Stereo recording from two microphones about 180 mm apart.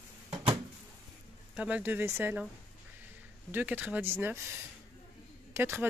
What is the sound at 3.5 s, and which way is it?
Speech, 10° right (ahead or behind).